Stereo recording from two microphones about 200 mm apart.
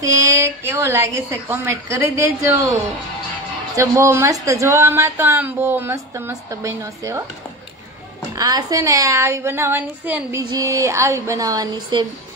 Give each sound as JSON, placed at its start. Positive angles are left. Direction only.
{"t": 0.0, "sound": "a woman's voice", "side_deg": -15}
{"t": 8.4, "sound": "a woman's voice", "side_deg": -20}